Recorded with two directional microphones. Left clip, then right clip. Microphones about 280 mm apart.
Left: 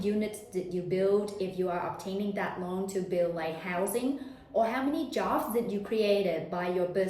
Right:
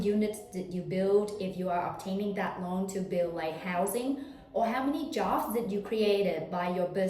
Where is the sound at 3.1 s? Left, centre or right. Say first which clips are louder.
Left 1 dB; centre.